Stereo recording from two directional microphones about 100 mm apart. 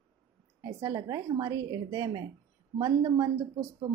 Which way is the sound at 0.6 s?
35° right (ahead or behind).